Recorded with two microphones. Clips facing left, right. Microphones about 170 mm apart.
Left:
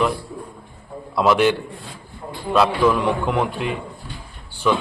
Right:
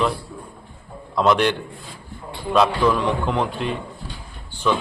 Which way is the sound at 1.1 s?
5° left (ahead or behind).